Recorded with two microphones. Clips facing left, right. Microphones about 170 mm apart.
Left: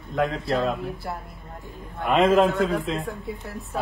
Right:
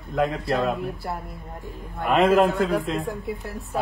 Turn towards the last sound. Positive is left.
turn(degrees=0)  # may be behind; listen again after turning